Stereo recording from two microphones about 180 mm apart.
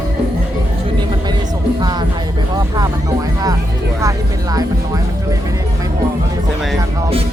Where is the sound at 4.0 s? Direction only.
20° right (ahead or behind).